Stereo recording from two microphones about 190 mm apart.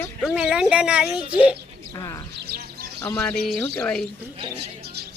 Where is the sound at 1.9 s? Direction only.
20° left (ahead or behind).